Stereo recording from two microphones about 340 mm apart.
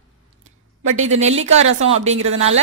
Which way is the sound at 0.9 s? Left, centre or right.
Centre.